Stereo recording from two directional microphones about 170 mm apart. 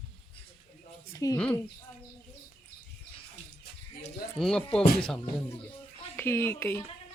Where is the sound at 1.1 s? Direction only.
20° left (ahead or behind).